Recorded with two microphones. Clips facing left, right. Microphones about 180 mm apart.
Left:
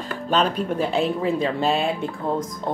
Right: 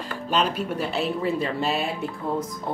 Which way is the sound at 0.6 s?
50° left (ahead or behind).